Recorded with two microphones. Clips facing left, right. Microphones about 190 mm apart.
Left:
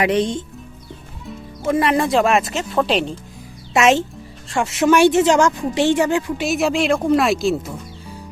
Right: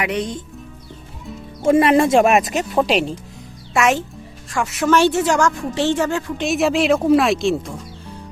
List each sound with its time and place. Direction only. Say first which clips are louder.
0.0 s speech: left 5 dB; 30° left (ahead or behind)
1.6 s speech: right 4 dB; 25° right (ahead or behind); by 3.1 s 10° right (ahead or behind)
3.8 s speech: left 3 dB; 25° left (ahead or behind)
4.9 s a woman's voice: left 3 dB; 15° left (ahead or behind)
6.4 s speech: right 5 dB; centre (ahead or behind)